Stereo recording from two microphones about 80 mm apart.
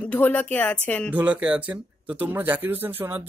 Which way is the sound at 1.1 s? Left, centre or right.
Centre.